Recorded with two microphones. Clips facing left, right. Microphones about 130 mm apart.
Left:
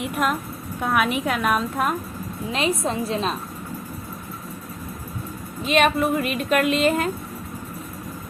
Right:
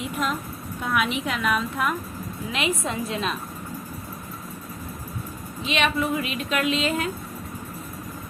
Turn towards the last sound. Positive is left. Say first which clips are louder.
# left 4 dB
turn(degrees=50)  # may be behind; listen again after turning